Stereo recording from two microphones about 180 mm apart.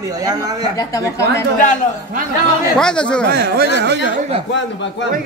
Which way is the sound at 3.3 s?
65° right (ahead or behind).